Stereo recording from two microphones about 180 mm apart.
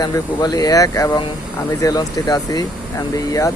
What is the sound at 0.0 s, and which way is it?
Speech, 20° left (ahead or behind).